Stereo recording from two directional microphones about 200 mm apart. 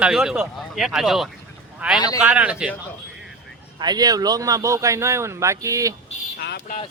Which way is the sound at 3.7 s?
20° right (ahead or behind).